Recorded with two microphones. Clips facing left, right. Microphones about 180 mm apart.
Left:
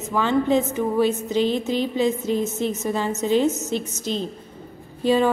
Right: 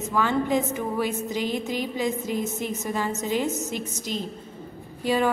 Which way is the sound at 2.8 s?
20° left (ahead or behind).